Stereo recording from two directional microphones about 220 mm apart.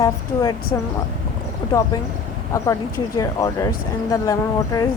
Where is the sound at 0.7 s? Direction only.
20° left (ahead or behind).